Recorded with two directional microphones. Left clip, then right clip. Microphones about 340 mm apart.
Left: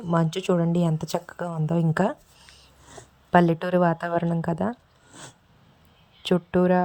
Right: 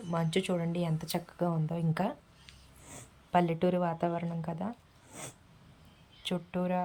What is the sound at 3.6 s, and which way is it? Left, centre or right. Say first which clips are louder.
Speech: left 7 dB; centre.